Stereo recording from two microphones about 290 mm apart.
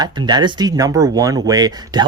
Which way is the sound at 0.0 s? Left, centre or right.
Centre.